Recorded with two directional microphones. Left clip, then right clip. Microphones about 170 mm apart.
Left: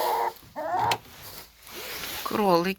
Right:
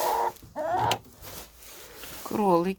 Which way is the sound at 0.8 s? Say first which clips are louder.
Left 1 dB; 90° right.